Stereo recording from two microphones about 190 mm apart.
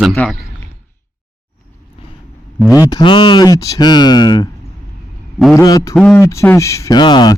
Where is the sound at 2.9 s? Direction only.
25° left (ahead or behind).